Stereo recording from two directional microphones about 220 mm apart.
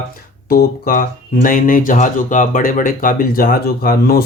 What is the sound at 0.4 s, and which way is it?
Speech, 40° left (ahead or behind).